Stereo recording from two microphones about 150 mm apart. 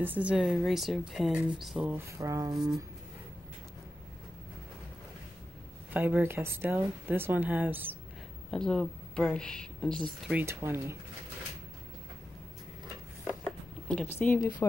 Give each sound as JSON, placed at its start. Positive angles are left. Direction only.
{"t": 0.0, "sound": "a woman's voice", "side_deg": -10}
{"t": 2.1, "sound": "speech", "side_deg": -20}
{"t": 2.5, "sound": "a woman's voice", "side_deg": 0}
{"t": 5.9, "sound": "a woman's voice", "side_deg": -10}
{"t": 8.5, "sound": "speech", "side_deg": 5}
{"t": 10.3, "sound": "a woman's voice", "side_deg": -15}
{"t": 13.8, "sound": "speech", "side_deg": 5}
{"t": 14.1, "sound": "speech", "side_deg": 15}